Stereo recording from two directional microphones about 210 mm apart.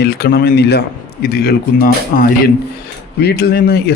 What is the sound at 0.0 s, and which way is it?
Speech, 45° left (ahead or behind).